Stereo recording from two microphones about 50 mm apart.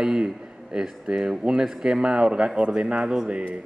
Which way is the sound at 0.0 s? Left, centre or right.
Centre.